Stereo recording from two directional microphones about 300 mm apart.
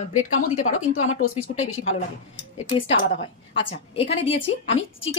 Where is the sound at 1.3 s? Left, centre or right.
Left.